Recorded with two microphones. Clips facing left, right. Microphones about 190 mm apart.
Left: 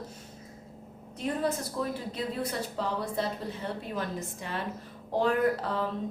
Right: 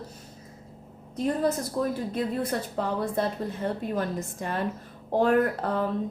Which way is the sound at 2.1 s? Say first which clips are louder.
Right 5 dB; 50° right (ahead or behind).